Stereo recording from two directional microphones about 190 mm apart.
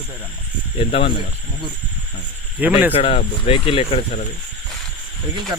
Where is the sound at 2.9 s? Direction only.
30° left (ahead or behind).